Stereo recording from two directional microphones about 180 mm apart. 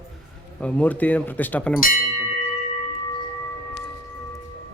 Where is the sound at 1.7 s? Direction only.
50° left (ahead or behind).